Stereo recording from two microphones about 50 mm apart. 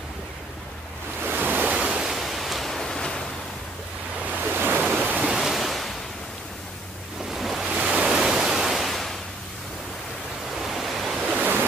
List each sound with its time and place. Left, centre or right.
1.2 s waves: right
1.8 s waves: centre
2.0 s pink noise: centre
4.4 s waves: right
5.0 s ocean: right
5.3 s waves: centre
7.2 s waves: centre
7.7 s waves: right
8.0 s pink noise: centre
10.5 s ocean: centre